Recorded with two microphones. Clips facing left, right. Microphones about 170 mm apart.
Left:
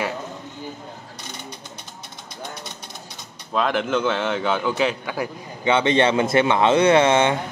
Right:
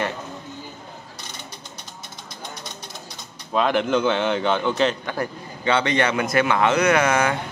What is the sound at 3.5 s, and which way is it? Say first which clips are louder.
A man's voice: right 2 dB; centre (ahead or behind).